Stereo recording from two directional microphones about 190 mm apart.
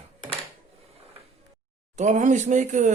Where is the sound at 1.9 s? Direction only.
40° right (ahead or behind).